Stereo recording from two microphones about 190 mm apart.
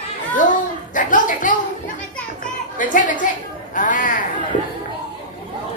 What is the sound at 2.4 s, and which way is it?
Children playing, 45° left (ahead or behind).